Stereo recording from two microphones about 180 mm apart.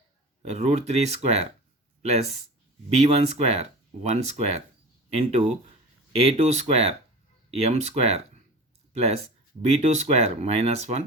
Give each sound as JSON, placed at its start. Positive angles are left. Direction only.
{"t": 0.4, "sound": "speech", "side_deg": -40}
{"t": 3.0, "sound": "speech", "side_deg": -35}